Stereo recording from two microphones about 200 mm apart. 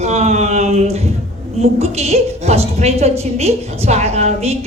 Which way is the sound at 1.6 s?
30° right (ahead or behind).